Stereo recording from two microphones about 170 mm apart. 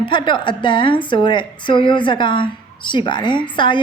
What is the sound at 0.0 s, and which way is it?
A woman's voice, 30° left (ahead or behind).